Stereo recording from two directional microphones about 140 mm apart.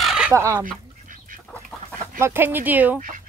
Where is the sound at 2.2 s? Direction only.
15° right (ahead or behind).